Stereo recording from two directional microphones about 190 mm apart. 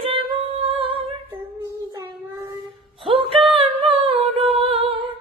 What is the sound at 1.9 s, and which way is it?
Child singing, 15° right (ahead or behind).